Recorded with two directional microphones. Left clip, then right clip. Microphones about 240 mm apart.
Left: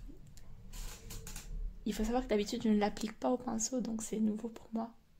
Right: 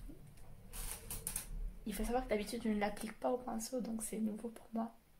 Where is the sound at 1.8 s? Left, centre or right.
Left.